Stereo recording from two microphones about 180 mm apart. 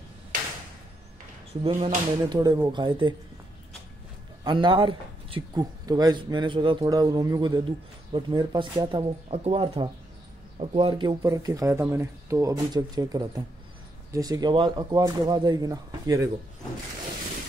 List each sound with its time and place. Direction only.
1.5 s speech: 30° right (ahead or behind)
2.3 s speech: 20° right (ahead or behind)
4.5 s speech: 25° right (ahead or behind)